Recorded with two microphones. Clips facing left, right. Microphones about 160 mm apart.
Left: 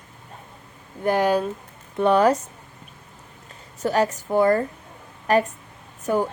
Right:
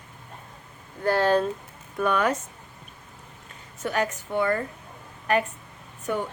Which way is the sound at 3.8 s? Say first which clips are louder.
Left 5 dB; 35° left (ahead or behind).